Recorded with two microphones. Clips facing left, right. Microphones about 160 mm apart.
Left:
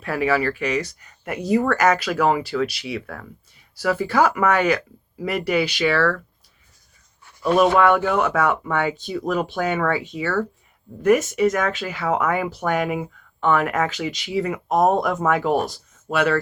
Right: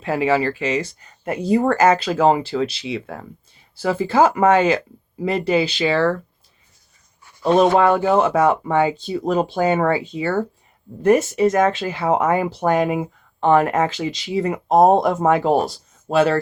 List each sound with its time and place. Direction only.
0.0 s speech: 25° right (ahead or behind)
7.4 s speech: 30° right (ahead or behind)